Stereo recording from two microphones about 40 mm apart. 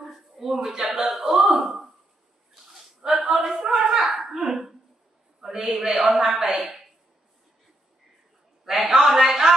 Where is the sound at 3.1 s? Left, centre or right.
Right.